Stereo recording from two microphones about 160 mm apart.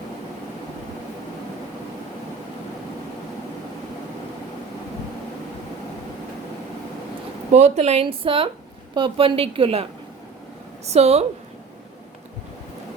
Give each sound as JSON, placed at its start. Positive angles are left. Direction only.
{"t": 7.5, "sound": "speech", "side_deg": -40}
{"t": 10.8, "sound": "speech", "side_deg": -40}